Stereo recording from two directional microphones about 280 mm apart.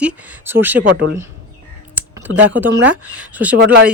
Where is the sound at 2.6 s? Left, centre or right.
Centre.